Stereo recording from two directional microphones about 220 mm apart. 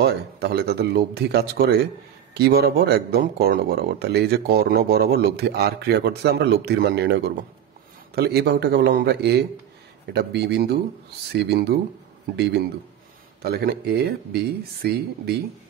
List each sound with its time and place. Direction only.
0.0 s speech: 50° right (ahead or behind)
13.4 s speech: 45° right (ahead or behind)